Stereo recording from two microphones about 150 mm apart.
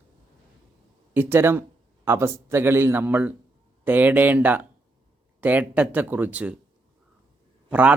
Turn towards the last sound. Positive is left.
turn(degrees=-10)  # may be behind; listen again after turning